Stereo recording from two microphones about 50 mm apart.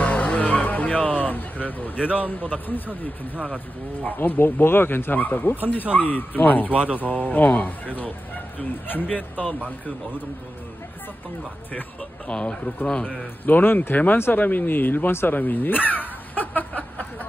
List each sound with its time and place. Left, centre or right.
0.0 s music: left
2.0 s speech: right
2.2 s speech: left
6.7 s speech: right
7.0 s speech: left
12.3 s speech: left
13.6 s speech: left